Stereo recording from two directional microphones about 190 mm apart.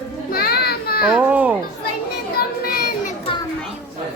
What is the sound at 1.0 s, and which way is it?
Children playing, 5° right (ahead or behind).